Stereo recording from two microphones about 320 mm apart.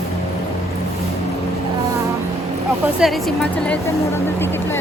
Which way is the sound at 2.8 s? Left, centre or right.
Centre.